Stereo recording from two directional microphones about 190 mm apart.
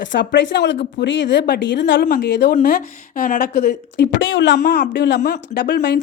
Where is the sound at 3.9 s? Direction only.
70° left (ahead or behind).